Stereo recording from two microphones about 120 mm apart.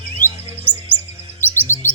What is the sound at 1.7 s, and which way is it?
Music, 20° left (ahead or behind).